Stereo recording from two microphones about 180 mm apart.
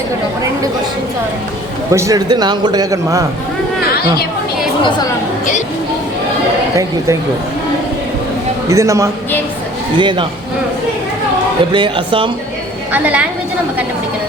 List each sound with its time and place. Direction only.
1.9 s a man's voice: 15° right (ahead or behind)
4.8 s speech: 25° left (ahead or behind)
8.7 s a man's voice: 15° right (ahead or behind)
11.7 s a man's voice: 25° right (ahead or behind)
12.9 s a man's voice: 10° right (ahead or behind)